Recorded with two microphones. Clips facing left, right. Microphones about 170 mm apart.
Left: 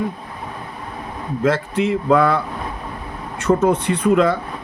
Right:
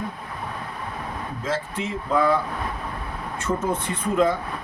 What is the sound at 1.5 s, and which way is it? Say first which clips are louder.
Speech: left 10 dB; 70° left (ahead or behind).